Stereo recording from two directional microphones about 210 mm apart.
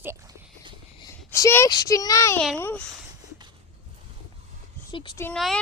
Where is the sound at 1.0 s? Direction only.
15° left (ahead or behind).